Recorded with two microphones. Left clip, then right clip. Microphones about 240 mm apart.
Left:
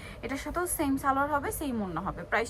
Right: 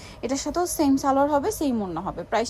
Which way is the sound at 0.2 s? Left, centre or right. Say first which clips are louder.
Right 7 dB; centre.